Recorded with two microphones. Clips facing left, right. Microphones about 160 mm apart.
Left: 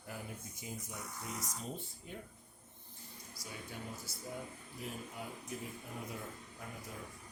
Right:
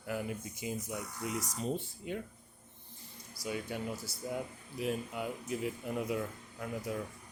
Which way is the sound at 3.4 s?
80° right.